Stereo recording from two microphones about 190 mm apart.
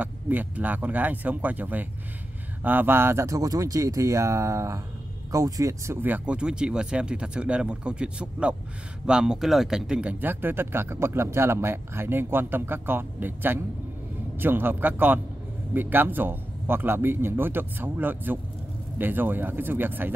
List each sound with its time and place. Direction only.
0.0 s speech: 10° right (ahead or behind)